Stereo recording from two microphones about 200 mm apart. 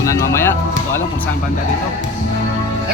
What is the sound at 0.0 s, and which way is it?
Speech, 15° left (ahead or behind).